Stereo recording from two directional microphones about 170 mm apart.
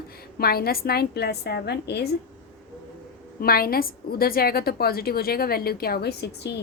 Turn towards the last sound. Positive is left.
turn(degrees=80)